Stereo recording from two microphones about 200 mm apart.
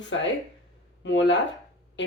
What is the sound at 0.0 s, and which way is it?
Speech, 65° left (ahead or behind).